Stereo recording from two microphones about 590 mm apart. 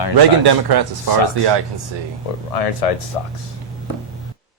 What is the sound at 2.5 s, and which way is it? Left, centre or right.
Speech, left.